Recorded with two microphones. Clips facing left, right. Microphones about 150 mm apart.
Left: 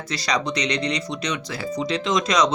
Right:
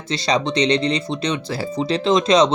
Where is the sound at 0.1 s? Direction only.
25° right (ahead or behind).